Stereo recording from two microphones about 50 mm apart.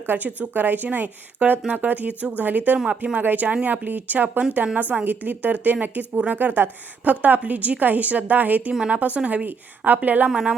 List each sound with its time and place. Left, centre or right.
0.3 s a woman's voice: right
2.7 s speech: centre
3.0 s a woman's voice: right
10.2 s speech: centre